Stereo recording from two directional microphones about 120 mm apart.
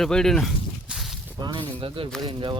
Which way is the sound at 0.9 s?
Centre (ahead or behind).